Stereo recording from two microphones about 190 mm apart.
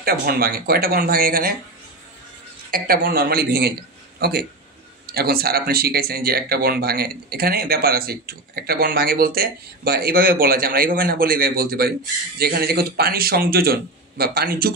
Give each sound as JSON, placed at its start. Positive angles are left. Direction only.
{"t": 0.0, "sound": "speech", "side_deg": -50}
{"t": 2.7, "sound": "speech", "side_deg": -50}